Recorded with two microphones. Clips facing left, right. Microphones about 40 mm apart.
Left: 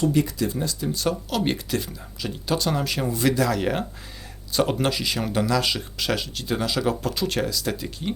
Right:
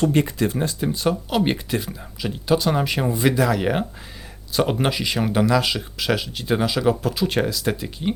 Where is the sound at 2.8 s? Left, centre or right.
Right.